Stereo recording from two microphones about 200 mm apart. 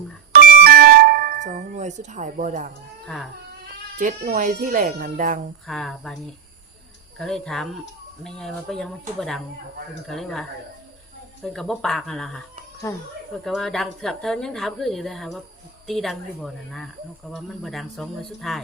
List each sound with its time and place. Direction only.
0.3 s a sound: 50° right (ahead or behind)
3.9 s speech: 45° right (ahead or behind)
5.6 s a woman's voice: 5° left (ahead or behind)
7.2 s a woman's voice: centre (ahead or behind)
11.4 s a woman's voice: centre (ahead or behind)
12.8 s speech: 15° left (ahead or behind)
13.4 s a woman's voice: centre (ahead or behind)